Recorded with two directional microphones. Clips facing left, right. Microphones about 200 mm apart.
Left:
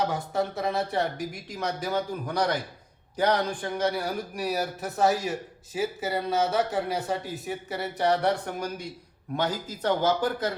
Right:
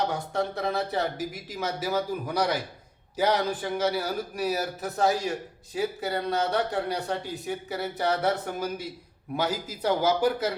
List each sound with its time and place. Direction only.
0.0 s a man's voice: centre (ahead or behind)